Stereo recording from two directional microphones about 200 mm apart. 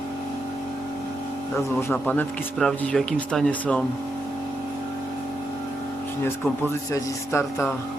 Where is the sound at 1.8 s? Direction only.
10° left (ahead or behind).